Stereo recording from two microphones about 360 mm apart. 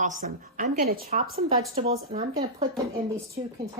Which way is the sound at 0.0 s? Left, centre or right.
Right.